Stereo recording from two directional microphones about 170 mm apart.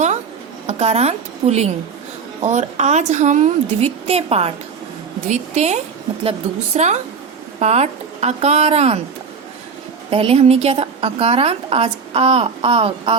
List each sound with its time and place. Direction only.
0.7 s a woman's voice: 40° right (ahead or behind)
10.1 s a woman's voice: 35° right (ahead or behind)